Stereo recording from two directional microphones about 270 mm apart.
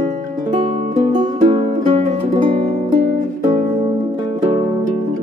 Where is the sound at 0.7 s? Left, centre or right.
Centre.